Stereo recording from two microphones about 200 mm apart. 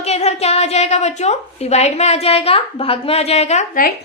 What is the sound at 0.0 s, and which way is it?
A woman's voice, 35° left (ahead or behind).